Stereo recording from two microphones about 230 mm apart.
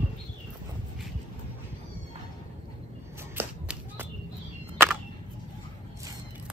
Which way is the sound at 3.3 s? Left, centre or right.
Centre.